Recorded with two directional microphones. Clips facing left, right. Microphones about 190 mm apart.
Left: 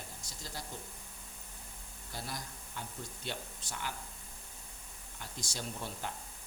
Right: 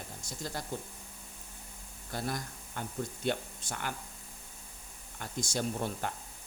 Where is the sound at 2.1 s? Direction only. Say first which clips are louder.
Right 7 dB; 50° right (ahead or behind).